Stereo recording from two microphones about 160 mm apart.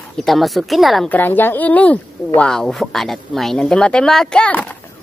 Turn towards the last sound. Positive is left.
turn(degrees=5)  # may be behind; listen again after turning